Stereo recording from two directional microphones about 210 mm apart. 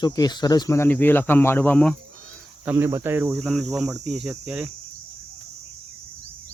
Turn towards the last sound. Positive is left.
turn(degrees=-5)  # may be behind; listen again after turning